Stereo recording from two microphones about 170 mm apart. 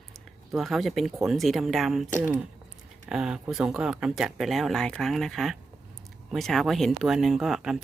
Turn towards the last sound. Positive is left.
turn(degrees=0)  # may be behind; listen again after turning